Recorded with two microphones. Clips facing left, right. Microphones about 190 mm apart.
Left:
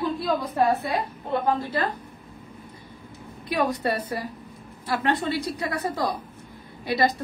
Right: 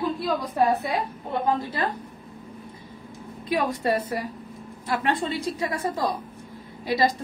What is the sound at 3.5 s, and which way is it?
Speech, 25° right (ahead or behind).